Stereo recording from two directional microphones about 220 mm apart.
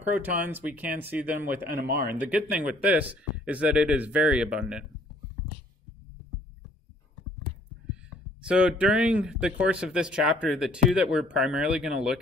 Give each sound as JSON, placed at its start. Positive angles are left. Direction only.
{"t": 0.0, "sound": "speech", "side_deg": -5}
{"t": 1.8, "sound": "speech", "side_deg": -40}
{"t": 2.1, "sound": "speech", "side_deg": -5}
{"t": 8.5, "sound": "speech", "side_deg": -5}